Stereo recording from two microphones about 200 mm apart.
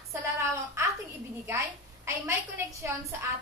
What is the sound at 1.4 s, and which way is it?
A woman's voice, 15° right (ahead or behind).